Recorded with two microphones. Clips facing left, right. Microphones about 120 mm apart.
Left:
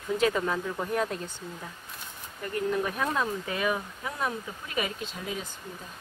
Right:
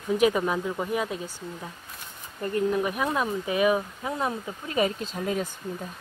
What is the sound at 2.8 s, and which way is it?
Speech, 15° right (ahead or behind).